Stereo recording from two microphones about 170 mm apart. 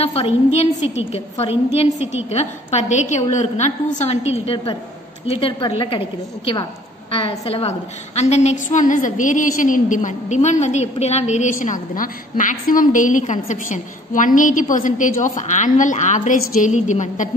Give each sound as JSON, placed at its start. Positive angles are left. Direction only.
{"t": 0.0, "sound": "a woman's voice", "side_deg": 35}